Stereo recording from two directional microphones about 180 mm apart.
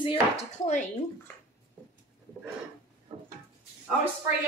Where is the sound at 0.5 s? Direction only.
40° left (ahead or behind).